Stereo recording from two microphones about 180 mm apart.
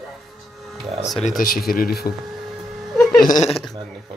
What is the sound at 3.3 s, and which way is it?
Speech, 40° left (ahead or behind).